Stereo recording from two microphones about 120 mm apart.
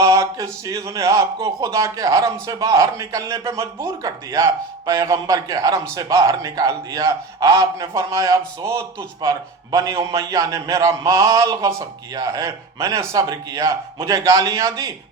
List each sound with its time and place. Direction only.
0.0 s a man's voice: 25° right (ahead or behind)